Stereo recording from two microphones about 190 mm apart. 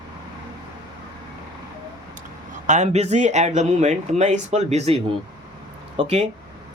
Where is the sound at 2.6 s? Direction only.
40° right (ahead or behind).